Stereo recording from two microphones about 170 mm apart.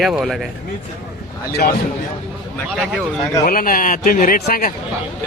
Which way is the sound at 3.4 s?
55° left (ahead or behind).